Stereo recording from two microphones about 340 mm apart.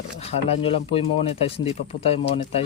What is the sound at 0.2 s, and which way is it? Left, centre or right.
Speech, centre.